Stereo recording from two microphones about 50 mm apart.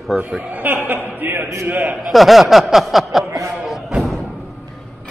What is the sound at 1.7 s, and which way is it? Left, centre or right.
Speech, right.